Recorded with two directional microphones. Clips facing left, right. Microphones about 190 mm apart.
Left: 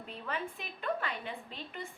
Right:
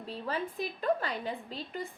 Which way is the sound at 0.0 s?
35° right (ahead or behind).